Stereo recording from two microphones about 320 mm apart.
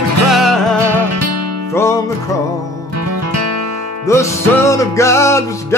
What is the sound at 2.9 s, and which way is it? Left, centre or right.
Music, right.